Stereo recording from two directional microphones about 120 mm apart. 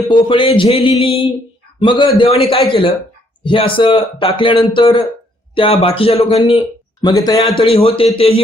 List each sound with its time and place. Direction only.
0.1 s a man's voice: 45° left (ahead or behind)
7.0 s a man's voice: 30° left (ahead or behind)
7.3 s a man's voice: 50° left (ahead or behind)